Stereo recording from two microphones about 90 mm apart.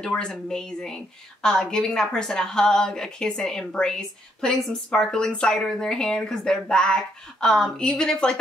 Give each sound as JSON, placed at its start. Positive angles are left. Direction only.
{"t": 0.0, "sound": "a woman's voice", "side_deg": 10}